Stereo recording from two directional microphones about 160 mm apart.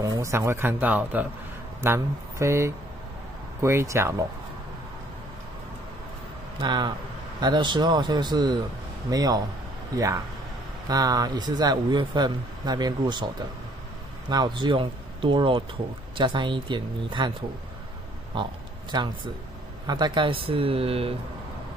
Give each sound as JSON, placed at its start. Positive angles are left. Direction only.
{"t": 0.0, "sound": "speech", "side_deg": -20}
{"t": 6.6, "sound": "speech", "side_deg": -25}
{"t": 18.3, "sound": "speech", "side_deg": -30}